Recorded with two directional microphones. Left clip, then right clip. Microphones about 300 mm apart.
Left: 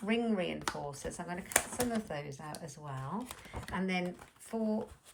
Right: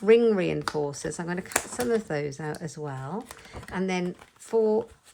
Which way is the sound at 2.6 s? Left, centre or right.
Centre.